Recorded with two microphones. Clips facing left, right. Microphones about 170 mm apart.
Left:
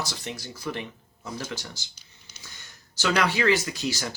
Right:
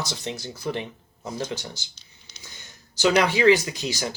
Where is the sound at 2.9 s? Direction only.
20° right (ahead or behind).